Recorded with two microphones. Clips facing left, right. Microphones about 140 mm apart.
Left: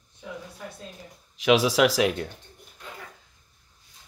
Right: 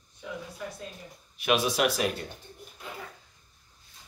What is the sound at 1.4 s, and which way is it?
Speech, 90° left.